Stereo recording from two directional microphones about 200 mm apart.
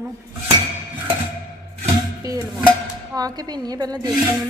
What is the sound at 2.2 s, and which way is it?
A woman's voice, 15° right (ahead or behind).